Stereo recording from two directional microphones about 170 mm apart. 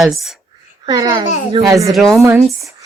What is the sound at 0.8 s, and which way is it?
Speech, 25° right (ahead or behind).